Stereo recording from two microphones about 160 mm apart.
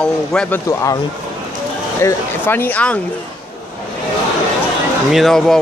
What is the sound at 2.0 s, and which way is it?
Speech, 10° left (ahead or behind).